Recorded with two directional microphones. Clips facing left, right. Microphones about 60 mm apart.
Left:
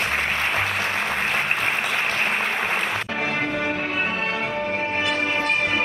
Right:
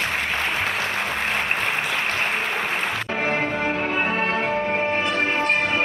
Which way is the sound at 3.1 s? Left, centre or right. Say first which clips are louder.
Right 1 dB; right.